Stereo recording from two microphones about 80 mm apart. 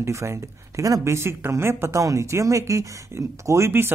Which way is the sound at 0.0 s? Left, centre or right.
Right.